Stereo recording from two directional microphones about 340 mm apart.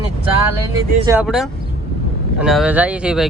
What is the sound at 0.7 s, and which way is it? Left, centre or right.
Speech, centre.